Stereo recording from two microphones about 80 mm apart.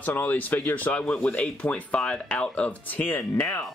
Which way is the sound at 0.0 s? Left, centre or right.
Left.